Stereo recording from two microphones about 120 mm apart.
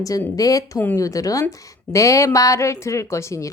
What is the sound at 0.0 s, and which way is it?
Speech, 30° left (ahead or behind).